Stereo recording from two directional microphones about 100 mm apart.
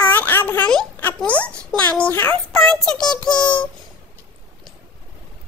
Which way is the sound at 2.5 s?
5° left (ahead or behind).